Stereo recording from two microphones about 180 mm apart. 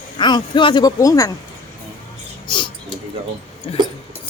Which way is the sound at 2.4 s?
25° left (ahead or behind).